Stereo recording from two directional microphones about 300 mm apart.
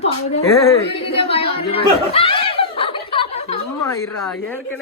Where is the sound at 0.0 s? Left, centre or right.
Centre.